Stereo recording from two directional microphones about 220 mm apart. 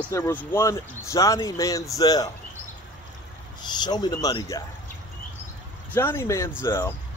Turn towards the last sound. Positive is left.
turn(degrees=10)  # may be behind; listen again after turning